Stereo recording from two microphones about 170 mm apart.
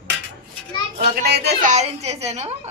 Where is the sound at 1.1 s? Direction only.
70° right (ahead or behind).